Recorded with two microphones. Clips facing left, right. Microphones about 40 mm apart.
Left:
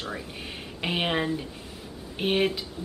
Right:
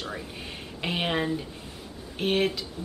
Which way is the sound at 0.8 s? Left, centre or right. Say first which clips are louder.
Left 1 dB; centre.